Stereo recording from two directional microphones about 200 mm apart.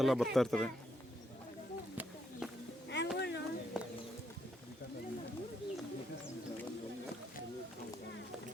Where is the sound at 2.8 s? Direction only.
60° left (ahead or behind).